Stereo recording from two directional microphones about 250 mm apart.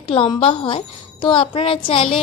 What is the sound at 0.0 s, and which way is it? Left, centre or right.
A woman's voice, left.